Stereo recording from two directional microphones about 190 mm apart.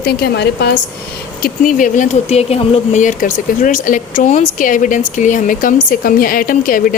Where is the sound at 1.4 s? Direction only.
45° left (ahead or behind).